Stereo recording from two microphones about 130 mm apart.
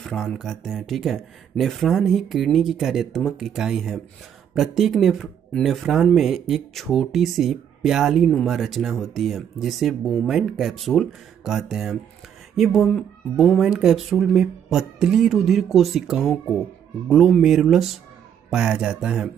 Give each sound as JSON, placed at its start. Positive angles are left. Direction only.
{"t": 0.0, "sound": "speech", "side_deg": 5}